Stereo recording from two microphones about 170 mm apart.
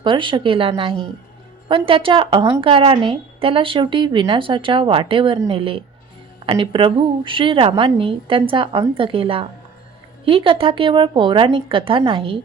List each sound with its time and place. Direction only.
0.0 s a woman's voice: 30° right (ahead or behind)